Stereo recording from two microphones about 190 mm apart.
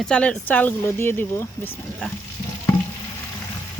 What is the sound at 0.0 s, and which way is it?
Speech, 5° left (ahead or behind).